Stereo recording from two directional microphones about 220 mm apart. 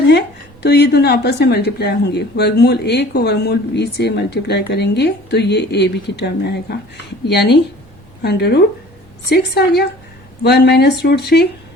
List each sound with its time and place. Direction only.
0.6 s speech: 50° left (ahead or behind)